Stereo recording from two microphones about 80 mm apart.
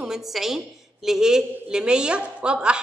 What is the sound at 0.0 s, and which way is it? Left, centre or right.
A woman's voice, centre.